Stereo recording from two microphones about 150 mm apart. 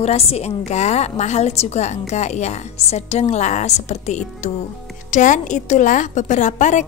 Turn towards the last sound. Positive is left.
turn(degrees=55)  # may be behind; listen again after turning